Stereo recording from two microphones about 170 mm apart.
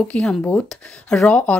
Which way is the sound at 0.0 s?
5° left (ahead or behind).